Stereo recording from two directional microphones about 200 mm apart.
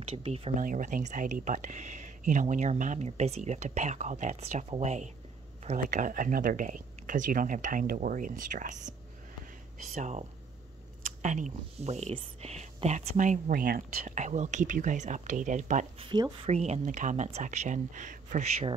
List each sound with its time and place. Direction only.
0.0 s speech: 30° right (ahead or behind)
0.6 s speech: 40° right (ahead or behind)
9.9 s speech: 35° right (ahead or behind)
11.2 s speech: 40° right (ahead or behind)